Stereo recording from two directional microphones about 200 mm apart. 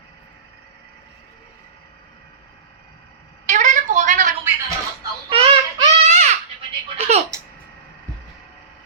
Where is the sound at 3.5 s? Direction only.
35° right (ahead or behind).